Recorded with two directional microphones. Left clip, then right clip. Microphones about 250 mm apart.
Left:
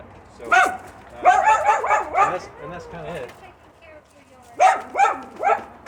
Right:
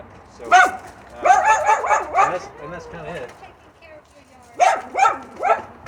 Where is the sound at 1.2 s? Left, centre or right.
Right.